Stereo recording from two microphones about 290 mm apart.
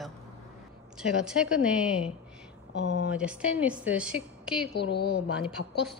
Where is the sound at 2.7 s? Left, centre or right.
Left.